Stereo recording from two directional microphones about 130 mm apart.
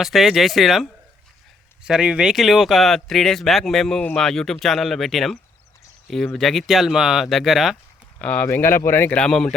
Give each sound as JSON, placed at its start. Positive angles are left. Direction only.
{"t": 0.0, "sound": "speech", "side_deg": 0}
{"t": 8.2, "sound": "speech", "side_deg": 10}